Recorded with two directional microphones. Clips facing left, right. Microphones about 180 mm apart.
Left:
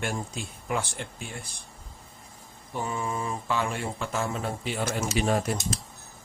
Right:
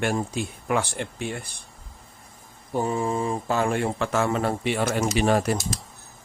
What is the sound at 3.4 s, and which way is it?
Speech, 45° right (ahead or behind).